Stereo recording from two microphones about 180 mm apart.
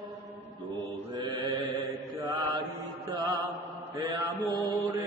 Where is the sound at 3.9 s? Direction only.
20° right (ahead or behind).